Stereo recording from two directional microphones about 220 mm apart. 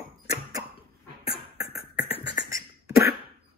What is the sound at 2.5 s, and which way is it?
Beatboxing, 15° right (ahead or behind).